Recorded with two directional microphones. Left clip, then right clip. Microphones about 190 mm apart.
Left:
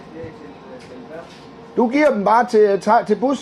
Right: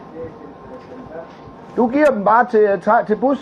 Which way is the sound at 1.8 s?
90° left.